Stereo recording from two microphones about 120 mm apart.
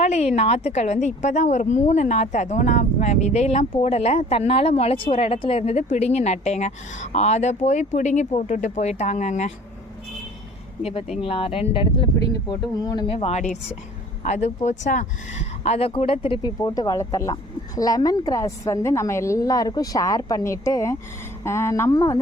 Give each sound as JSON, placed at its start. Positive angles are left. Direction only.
{"t": 0.0, "sound": "a sound", "side_deg": 65}
{"t": 0.3, "sound": "a woman's voice", "side_deg": 65}
{"t": 11.2, "sound": "speech", "side_deg": 50}
{"t": 12.5, "sound": "speech", "side_deg": 30}
{"t": 13.1, "sound": "speech", "side_deg": 60}
{"t": 16.4, "sound": "a woman's voice", "side_deg": 30}